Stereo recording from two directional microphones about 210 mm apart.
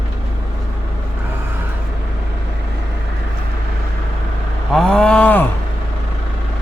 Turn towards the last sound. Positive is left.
turn(degrees=10)  # may be behind; listen again after turning